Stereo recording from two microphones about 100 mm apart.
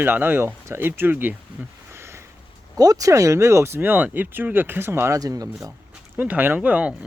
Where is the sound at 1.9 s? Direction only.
25° right (ahead or behind).